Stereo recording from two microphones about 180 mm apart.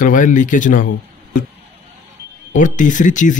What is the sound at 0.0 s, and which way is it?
Speech, 45° left (ahead or behind).